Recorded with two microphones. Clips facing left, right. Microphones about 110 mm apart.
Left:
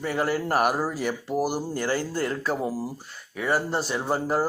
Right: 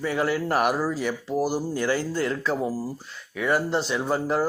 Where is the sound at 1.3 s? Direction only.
15° left (ahead or behind).